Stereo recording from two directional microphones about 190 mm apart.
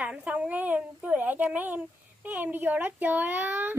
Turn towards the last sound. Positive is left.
turn(degrees=-10)  # may be behind; listen again after turning